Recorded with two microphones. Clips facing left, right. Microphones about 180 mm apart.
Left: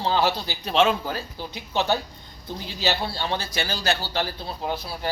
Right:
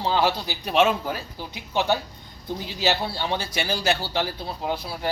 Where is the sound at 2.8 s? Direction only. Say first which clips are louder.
Right 1 dB; 10° right (ahead or behind).